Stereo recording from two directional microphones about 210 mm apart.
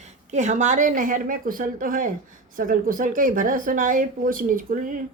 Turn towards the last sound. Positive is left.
turn(degrees=-40)  # may be behind; listen again after turning